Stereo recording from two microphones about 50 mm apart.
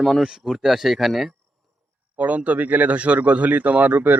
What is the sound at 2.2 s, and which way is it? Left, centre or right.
Speech, right.